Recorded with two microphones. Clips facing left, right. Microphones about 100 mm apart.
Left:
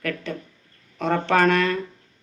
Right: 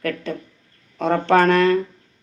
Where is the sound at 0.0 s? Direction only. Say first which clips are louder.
Right 3 dB; 35° right (ahead or behind).